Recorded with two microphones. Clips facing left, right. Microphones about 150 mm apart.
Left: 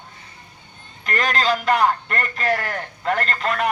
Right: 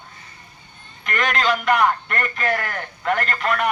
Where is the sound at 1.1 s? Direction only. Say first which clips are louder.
Even; 35° left (ahead or behind).